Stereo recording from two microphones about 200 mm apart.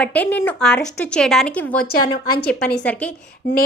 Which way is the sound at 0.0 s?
5° left (ahead or behind).